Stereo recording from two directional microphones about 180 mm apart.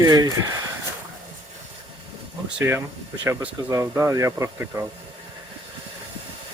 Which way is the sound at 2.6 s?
10° right (ahead or behind).